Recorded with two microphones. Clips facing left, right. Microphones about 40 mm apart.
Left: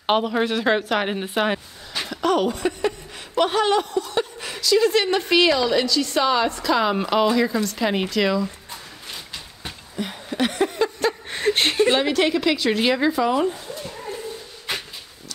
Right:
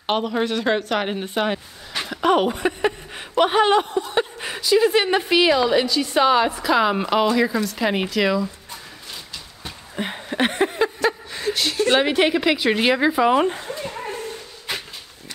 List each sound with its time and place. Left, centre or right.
0.0 s a woman's voice: centre
2.2 s a woman's voice: right; by 8.5 s centre
9.9 s a sound: right
11.2 s a sound: left
12.0 s a woman's voice: right
13.3 s speech: right